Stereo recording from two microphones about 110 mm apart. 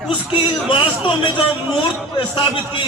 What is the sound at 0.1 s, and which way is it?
A man's voice, 50° left (ahead or behind).